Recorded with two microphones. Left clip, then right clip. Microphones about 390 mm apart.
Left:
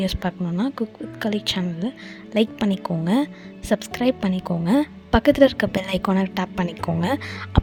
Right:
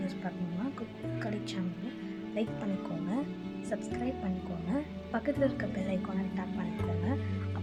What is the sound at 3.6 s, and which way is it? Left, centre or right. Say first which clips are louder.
A woman's voice: left 15 dB; left.